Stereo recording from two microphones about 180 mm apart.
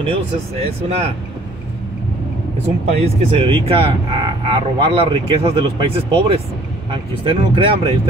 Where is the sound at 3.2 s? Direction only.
30° right (ahead or behind).